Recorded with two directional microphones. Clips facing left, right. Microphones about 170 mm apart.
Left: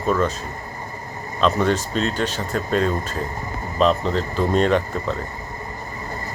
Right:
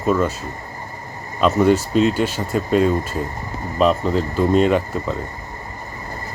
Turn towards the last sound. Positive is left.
turn(degrees=-5)  # may be behind; listen again after turning